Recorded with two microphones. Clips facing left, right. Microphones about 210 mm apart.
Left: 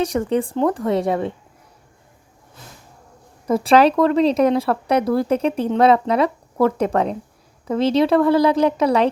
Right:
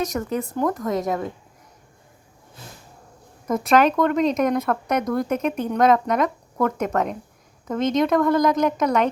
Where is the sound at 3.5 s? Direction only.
30° left (ahead or behind).